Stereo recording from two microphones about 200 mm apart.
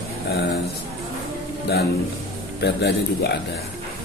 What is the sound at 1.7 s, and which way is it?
A man's voice, 55° left (ahead or behind).